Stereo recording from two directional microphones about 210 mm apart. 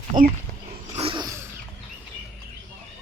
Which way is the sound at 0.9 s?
25° right (ahead or behind).